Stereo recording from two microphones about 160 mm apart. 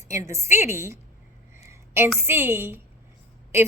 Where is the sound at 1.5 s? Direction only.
15° right (ahead or behind).